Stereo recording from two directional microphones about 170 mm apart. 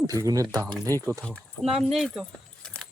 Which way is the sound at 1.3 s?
5° left (ahead or behind).